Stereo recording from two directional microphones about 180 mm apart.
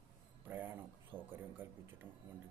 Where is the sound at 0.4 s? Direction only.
10° right (ahead or behind).